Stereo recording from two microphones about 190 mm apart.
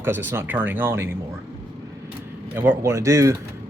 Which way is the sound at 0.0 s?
10° right (ahead or behind).